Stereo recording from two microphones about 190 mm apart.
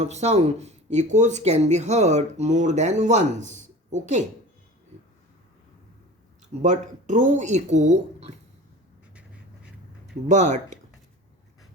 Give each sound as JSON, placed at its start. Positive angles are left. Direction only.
{"t": 0.0, "sound": "speech", "side_deg": -35}
{"t": 6.5, "sound": "speech", "side_deg": -40}
{"t": 10.2, "sound": "speech", "side_deg": -40}